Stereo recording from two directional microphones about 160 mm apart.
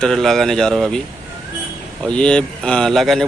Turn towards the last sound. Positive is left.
turn(degrees=0)  # may be behind; listen again after turning